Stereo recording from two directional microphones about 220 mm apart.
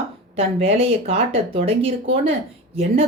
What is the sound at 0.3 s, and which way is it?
A woman's voice, 25° right (ahead or behind).